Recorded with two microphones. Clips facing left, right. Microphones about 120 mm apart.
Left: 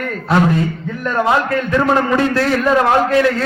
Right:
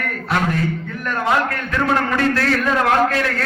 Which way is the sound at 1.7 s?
20° left (ahead or behind).